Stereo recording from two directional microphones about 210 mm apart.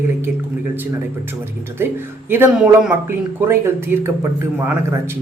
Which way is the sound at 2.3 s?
10° right (ahead or behind).